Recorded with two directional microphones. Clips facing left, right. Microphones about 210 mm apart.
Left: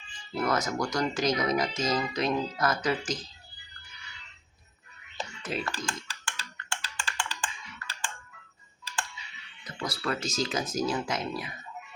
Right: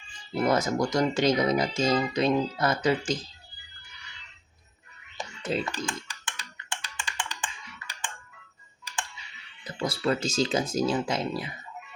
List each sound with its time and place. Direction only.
0.3 s speech: 30° right (ahead or behind)
5.4 s a sound: 30° right (ahead or behind)
5.6 s music: 20° right (ahead or behind)
9.6 s speech: 30° right (ahead or behind)